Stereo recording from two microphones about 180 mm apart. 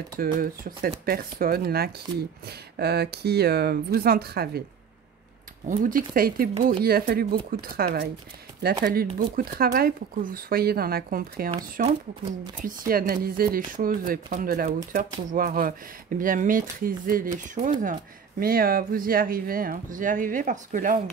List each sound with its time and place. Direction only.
0.2 s speech: 55° right (ahead or behind)
5.7 s speech: 45° right (ahead or behind)